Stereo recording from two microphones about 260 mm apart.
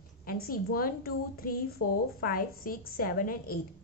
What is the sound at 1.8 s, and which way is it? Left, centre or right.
Speech, left.